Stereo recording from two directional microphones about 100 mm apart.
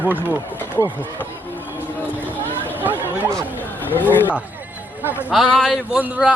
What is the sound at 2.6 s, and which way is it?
Chatter, 20° right (ahead or behind).